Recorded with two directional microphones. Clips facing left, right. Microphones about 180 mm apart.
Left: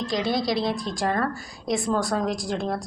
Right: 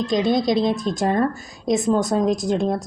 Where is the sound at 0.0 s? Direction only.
20° right (ahead or behind).